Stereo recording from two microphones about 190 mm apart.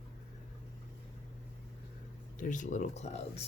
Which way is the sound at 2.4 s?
40° left (ahead or behind).